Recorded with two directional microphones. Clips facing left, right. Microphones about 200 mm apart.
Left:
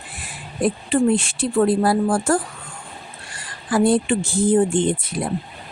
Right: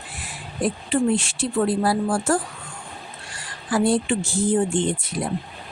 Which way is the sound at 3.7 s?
55° left (ahead or behind).